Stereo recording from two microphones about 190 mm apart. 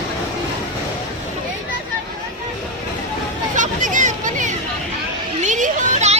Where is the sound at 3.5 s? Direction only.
40° right (ahead or behind).